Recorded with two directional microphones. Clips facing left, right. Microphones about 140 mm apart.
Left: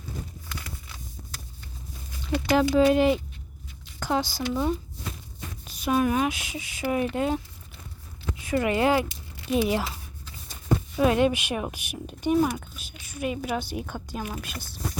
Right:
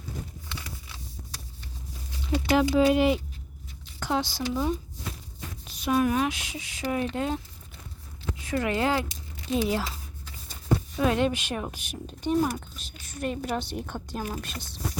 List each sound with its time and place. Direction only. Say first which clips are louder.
2.6 s speech: left 2 dB; 5° right (ahead or behind)
8.4 s speech: left 3 dB; 10° left (ahead or behind)
11.0 s speech: left 4 dB; 10° left (ahead or behind)
14.2 s speech: right 1 dB; 35° right (ahead or behind)